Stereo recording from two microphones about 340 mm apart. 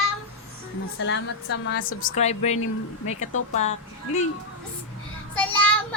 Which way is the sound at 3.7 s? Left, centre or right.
Centre.